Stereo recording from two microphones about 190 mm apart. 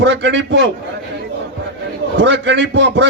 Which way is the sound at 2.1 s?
70° right (ahead or behind).